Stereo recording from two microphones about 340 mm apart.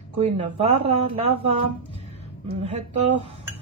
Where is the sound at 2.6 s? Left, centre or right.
Centre.